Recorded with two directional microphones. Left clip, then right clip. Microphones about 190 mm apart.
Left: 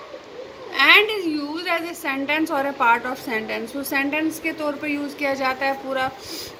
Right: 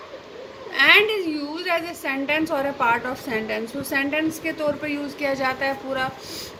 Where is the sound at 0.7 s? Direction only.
35° right (ahead or behind).